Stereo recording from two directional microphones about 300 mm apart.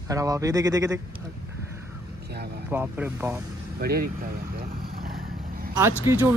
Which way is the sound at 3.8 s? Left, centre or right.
Right.